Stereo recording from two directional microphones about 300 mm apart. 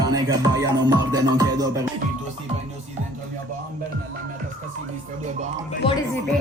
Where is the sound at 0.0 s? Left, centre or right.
Centre.